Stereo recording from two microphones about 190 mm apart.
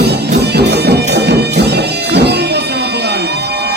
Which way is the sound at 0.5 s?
60° right (ahead or behind).